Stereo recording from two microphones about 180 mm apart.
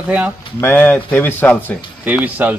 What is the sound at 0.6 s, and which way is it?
Speech, 10° left (ahead or behind).